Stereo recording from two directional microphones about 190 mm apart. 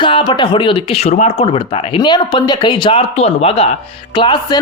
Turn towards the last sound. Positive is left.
turn(degrees=25)  # may be behind; listen again after turning